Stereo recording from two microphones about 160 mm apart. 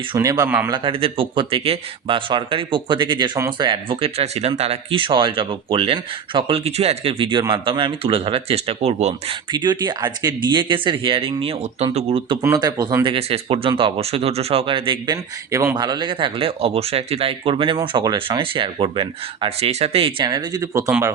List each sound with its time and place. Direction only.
0.2 s speech: 20° right (ahead or behind)
0.7 s speech: 35° right (ahead or behind)
9.5 s speech: 30° right (ahead or behind)
12.4 s speech: 20° right (ahead or behind)
13.1 s speech: 40° right (ahead or behind); by 20.9 s 20° right (ahead or behind)